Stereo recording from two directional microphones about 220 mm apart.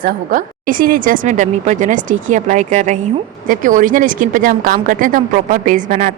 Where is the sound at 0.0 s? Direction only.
40° right (ahead or behind).